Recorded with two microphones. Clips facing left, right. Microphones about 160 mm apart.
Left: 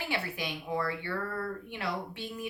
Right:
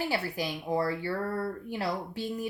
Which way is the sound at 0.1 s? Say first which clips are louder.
Right 3 dB; 35° right (ahead or behind).